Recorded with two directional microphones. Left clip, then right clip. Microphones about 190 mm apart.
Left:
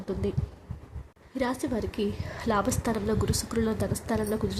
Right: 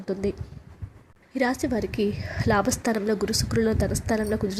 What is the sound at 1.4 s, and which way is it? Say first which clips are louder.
A woman's voice: right 5 dB; 20° right (ahead or behind).